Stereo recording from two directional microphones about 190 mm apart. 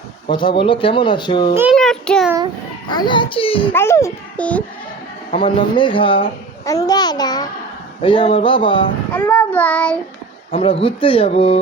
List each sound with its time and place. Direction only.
0.3 s speech: 25° left (ahead or behind)
1.7 s a child's voice: 5° left (ahead or behind)
2.9 s speech: 25° left (ahead or behind)
3.7 s a child's voice: 15° left (ahead or behind)
5.3 s speech: 25° left (ahead or behind)
9.1 s a child's voice: 10° left (ahead or behind)
10.5 s speech: 30° left (ahead or behind)